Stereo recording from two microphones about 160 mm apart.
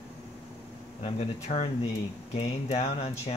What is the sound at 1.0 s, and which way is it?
Speech, 40° left (ahead or behind).